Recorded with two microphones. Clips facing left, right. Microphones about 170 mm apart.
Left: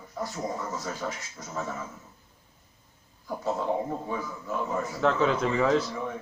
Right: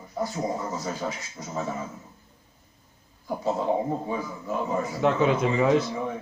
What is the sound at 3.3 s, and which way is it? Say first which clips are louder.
Speech: right 3 dB; 15° right (ahead or behind).